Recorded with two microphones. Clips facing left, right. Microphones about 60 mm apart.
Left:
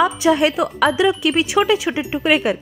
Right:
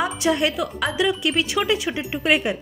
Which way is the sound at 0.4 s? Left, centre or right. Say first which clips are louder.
Left 6 dB; left.